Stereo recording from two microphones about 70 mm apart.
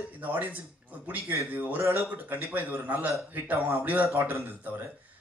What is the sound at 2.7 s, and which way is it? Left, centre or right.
Speech, right.